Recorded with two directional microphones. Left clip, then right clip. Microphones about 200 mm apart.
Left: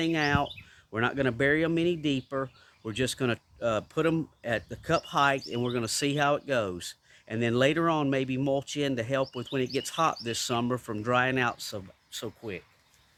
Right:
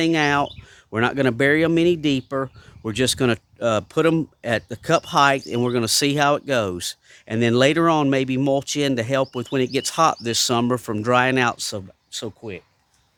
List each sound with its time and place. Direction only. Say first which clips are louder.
0.0 s speech: right 8 dB; 50° right (ahead or behind)